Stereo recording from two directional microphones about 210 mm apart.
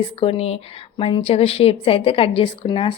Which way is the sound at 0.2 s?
25° left (ahead or behind).